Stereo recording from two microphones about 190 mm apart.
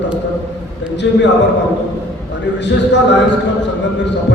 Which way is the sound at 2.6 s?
65° left (ahead or behind).